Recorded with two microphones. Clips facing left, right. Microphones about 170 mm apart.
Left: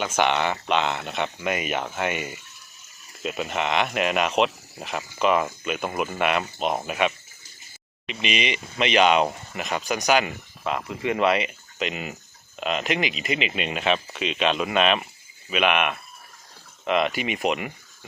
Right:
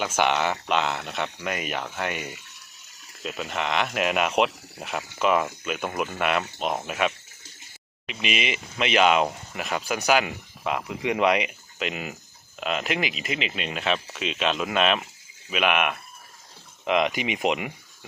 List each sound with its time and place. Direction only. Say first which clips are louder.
0.2 s speech: left 1 dB; 5° right (ahead or behind)
7.1 s a sound: right 2 dB; 70° right (ahead or behind)
8.0 s speech: left 2 dB; 5° right (ahead or behind)
11.8 s speech: left 1 dB; centre (ahead or behind)
16.8 s speech: even; 15° right (ahead or behind)